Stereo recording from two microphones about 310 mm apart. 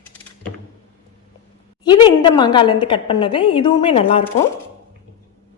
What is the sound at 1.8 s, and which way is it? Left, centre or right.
A woman's voice, centre.